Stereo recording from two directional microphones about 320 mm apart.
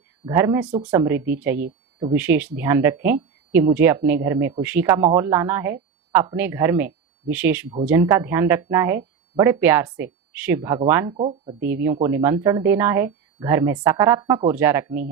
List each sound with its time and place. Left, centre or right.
0.3 s speech: centre